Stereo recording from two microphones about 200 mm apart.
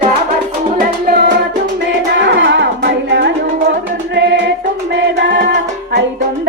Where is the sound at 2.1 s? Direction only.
65° right (ahead or behind).